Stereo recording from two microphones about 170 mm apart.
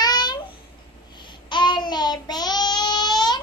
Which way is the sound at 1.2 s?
25° left (ahead or behind).